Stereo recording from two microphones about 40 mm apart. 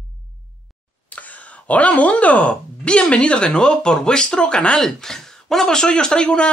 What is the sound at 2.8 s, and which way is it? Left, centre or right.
Speech, left.